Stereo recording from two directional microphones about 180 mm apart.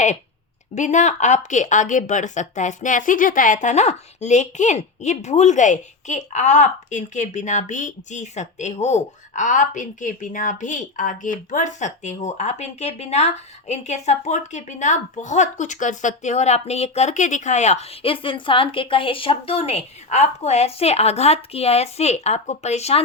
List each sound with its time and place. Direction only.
0.8 s speech: 40° left (ahead or behind)